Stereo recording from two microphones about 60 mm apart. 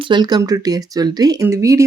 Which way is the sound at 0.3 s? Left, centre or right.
Right.